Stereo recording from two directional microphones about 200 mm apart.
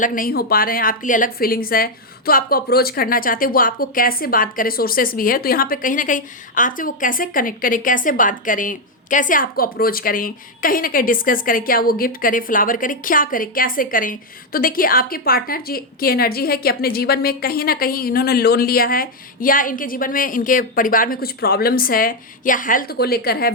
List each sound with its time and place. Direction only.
0.0 s a woman's voice: 45° left (ahead or behind)